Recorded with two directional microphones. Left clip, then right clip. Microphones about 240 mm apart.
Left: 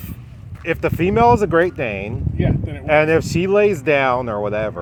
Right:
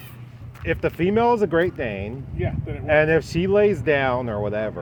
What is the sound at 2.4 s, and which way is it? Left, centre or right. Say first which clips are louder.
Speech: left 5 dB; left.